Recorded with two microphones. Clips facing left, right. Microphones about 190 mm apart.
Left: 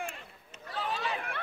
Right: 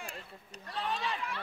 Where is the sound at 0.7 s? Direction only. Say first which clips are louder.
Left 1 dB; centre (ahead or behind).